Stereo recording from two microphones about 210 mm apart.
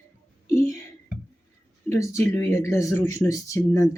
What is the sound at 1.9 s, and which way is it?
Speech, 15° left (ahead or behind).